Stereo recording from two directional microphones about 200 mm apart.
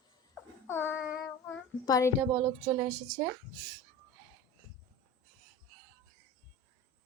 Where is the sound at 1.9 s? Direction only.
15° left (ahead or behind).